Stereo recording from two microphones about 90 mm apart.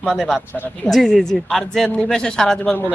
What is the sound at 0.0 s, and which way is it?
Speech, 5° right (ahead or behind).